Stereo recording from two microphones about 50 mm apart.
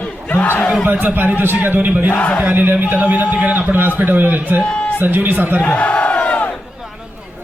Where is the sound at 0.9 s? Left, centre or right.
Right.